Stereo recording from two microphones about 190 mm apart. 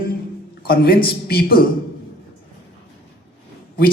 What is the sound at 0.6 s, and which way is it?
A man's voice, 55° left (ahead or behind).